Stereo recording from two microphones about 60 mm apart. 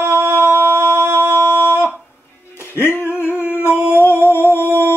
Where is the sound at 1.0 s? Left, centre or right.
Right.